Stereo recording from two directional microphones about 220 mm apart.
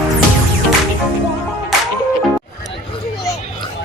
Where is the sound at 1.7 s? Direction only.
Centre (ahead or behind).